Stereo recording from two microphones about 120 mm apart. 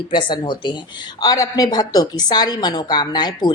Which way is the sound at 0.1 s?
40° left (ahead or behind).